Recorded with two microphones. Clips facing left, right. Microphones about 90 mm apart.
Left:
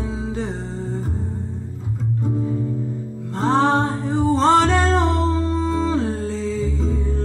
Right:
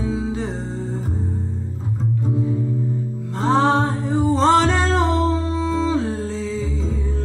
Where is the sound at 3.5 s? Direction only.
45° left (ahead or behind).